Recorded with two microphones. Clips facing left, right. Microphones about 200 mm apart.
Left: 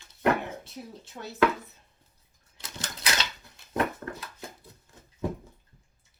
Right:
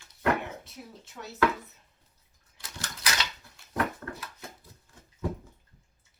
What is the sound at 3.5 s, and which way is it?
Dog, 20° left (ahead or behind).